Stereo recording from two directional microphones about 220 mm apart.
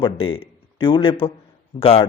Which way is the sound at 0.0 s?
25° left (ahead or behind).